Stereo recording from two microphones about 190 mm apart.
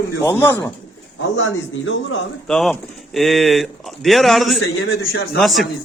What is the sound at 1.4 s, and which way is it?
Speech, 80° left.